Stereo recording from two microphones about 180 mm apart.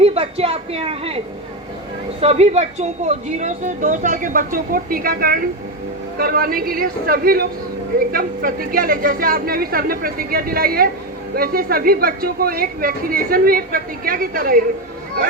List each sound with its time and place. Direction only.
0.0 s a woman's voice: 35° right (ahead or behind)
2.2 s a woman's voice: 35° right (ahead or behind); by 14.6 s 55° right (ahead or behind)